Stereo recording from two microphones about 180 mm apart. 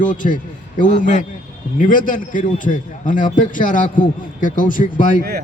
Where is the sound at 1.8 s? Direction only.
45° left (ahead or behind).